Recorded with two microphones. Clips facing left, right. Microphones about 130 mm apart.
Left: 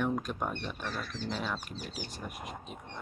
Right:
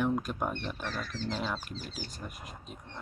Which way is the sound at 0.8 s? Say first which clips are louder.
Right 1 dB; 10° left (ahead or behind).